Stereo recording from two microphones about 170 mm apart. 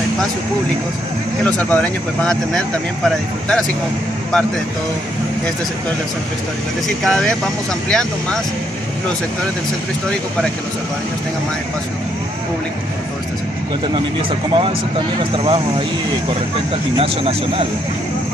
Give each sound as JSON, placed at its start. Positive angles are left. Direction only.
{"t": 1.4, "sound": "speech", "side_deg": 10}
{"t": 7.1, "sound": "speech", "side_deg": 5}
{"t": 14.5, "sound": "speech", "side_deg": -30}
{"t": 16.9, "sound": "speech", "side_deg": -35}